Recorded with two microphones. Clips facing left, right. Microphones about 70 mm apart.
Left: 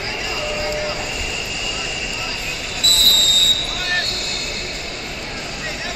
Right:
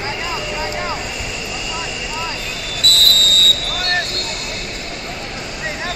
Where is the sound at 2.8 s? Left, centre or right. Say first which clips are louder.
Right 3 dB; right.